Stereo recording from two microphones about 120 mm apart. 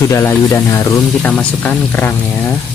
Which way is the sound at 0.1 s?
20° left (ahead or behind).